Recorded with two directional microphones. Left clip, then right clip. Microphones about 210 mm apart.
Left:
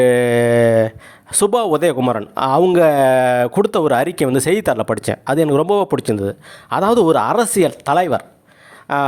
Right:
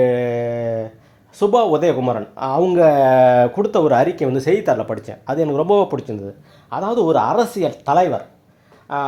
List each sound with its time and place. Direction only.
0.0 s mantra: 40° left (ahead or behind)
1.3 s speech: 40° left (ahead or behind)